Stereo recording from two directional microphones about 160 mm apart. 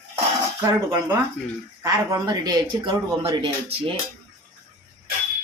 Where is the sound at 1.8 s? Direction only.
20° right (ahead or behind).